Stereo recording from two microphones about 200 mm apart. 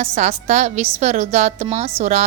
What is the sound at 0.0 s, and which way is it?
A woman's voice, 30° right (ahead or behind).